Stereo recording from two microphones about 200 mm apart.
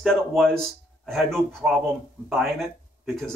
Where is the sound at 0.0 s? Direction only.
Centre (ahead or behind).